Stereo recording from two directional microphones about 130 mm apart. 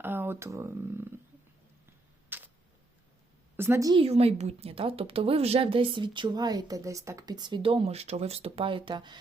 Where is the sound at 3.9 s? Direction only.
50° right (ahead or behind).